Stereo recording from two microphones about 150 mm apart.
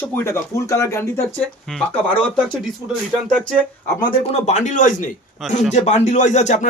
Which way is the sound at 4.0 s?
35° left (ahead or behind).